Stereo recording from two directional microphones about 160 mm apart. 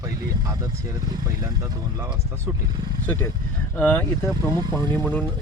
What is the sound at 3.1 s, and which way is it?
Speech, 10° left (ahead or behind).